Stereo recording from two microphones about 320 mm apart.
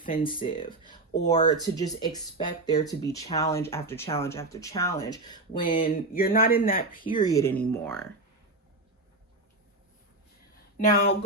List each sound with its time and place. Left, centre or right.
0.0 s speech: left
5.6 s speech: left
7.0 s speech: centre
10.8 s speech: left